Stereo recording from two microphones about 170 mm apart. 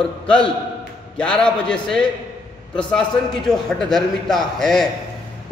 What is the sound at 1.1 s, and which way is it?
A man's voice, 5° left (ahead or behind).